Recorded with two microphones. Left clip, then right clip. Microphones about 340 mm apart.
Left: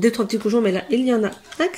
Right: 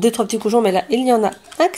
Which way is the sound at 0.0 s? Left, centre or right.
Centre.